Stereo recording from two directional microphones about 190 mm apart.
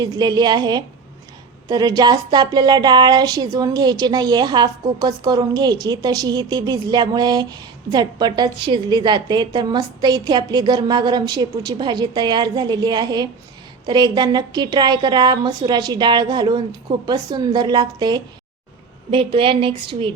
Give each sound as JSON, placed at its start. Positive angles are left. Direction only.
{"t": 0.0, "sound": "a woman's voice", "side_deg": -20}